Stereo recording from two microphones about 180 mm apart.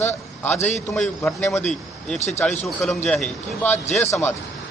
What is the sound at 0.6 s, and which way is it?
Speech, 40° left (ahead or behind).